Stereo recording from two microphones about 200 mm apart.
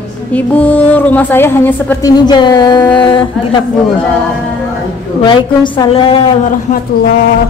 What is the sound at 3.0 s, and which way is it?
Speech, 25° left (ahead or behind).